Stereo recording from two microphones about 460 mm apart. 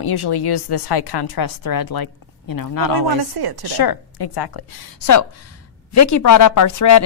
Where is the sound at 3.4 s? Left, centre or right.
Right.